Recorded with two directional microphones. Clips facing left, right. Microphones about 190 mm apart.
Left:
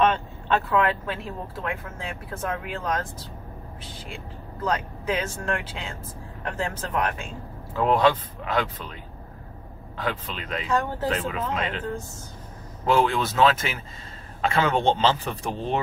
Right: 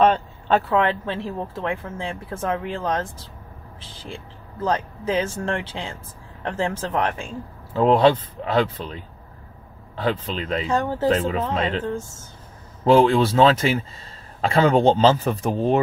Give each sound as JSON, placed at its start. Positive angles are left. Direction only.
{"t": 0.0, "sound": "speech", "side_deg": -35}
{"t": 4.6, "sound": "speech", "side_deg": -30}
{"t": 9.9, "sound": "speech", "side_deg": -30}